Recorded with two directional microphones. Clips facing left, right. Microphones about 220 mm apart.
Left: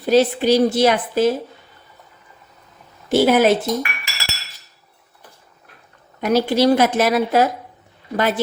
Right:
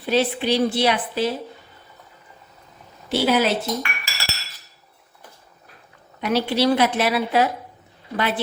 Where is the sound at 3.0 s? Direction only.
50° left (ahead or behind).